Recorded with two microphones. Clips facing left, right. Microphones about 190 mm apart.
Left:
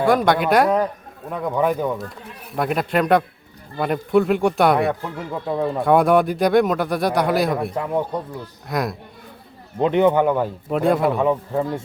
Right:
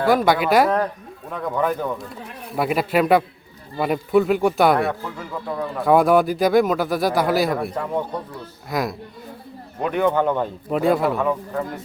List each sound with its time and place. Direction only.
0.0 s speech: centre (ahead or behind)
2.6 s speech: 5° right (ahead or behind)
5.0 s speech: 20° left (ahead or behind)
5.8 s speech: centre (ahead or behind)
9.8 s speech: 20° left (ahead or behind)
10.1 s speech: 10° left (ahead or behind)
11.2 s speech: 20° left (ahead or behind)